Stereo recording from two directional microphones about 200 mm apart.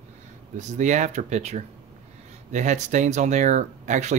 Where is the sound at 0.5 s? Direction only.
35° right (ahead or behind).